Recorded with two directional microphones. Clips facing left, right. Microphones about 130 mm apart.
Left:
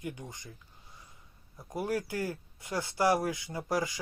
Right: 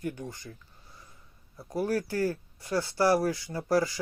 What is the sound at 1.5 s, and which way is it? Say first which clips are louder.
Speech: right 4 dB; 15° left (ahead or behind).